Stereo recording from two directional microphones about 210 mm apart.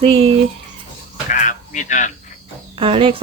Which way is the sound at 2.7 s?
25° right (ahead or behind).